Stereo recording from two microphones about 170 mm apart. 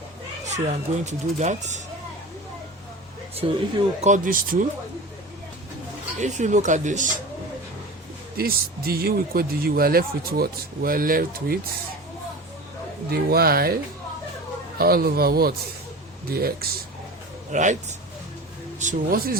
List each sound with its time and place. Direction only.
1.0 s speech: 45° right (ahead or behind)
3.3 s speech: 40° right (ahead or behind); by 4.6 s 55° right (ahead or behind)
6.1 s speech: 45° right (ahead or behind)
8.4 s speech: 65° right (ahead or behind)
13.1 s speech: 65° right (ahead or behind)
14.8 s speech: 65° right (ahead or behind)
17.5 s speech: 45° right (ahead or behind)
18.8 s speech: 55° right (ahead or behind)